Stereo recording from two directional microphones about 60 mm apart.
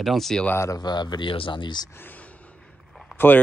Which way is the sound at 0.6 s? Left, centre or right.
Left.